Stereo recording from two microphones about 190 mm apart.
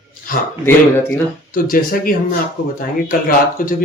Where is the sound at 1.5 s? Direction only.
45° left (ahead or behind).